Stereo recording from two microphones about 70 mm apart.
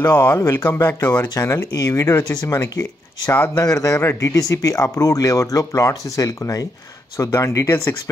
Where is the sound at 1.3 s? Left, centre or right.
Left.